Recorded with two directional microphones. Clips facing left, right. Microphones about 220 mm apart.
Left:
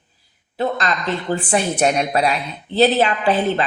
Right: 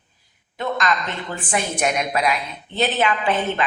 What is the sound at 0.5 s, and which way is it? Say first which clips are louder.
Speech: left 2 dB; 35° left (ahead or behind).